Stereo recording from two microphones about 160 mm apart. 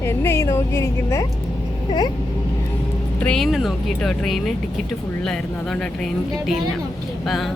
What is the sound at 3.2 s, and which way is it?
Speech, 5° left (ahead or behind).